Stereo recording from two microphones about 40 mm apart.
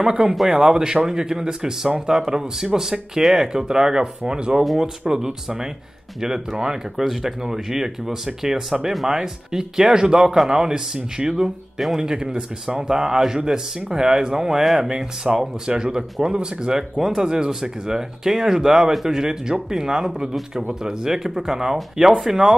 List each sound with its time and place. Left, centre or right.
0.0 s speech: centre
14.6 s speech: centre
15.3 s speech: centre